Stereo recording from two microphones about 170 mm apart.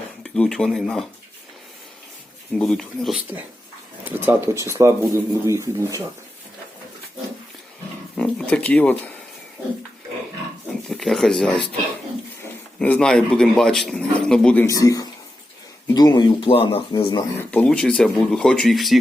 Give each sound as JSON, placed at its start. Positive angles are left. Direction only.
{"t": 0.2, "sound": "speech", "side_deg": 5}
{"t": 2.6, "sound": "speech", "side_deg": 0}
{"t": 4.0, "sound": "speech", "side_deg": -15}
{"t": 8.1, "sound": "a sound", "side_deg": 5}
{"t": 10.8, "sound": "speech", "side_deg": 0}
{"t": 14.8, "sound": "speech", "side_deg": 20}
{"t": 17.5, "sound": "speech", "side_deg": 5}